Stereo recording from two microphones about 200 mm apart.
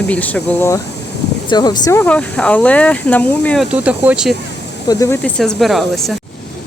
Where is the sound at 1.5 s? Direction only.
20° left (ahead or behind).